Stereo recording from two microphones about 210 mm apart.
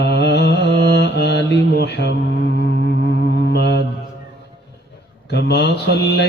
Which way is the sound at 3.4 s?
50° left (ahead or behind).